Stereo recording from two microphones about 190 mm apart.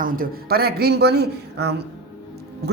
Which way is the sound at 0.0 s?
50° right (ahead or behind).